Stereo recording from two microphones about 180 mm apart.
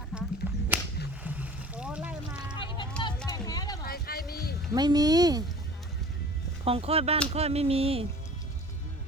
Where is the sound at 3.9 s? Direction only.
55° left (ahead or behind).